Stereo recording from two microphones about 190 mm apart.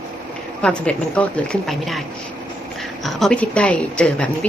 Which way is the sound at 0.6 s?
5° left (ahead or behind).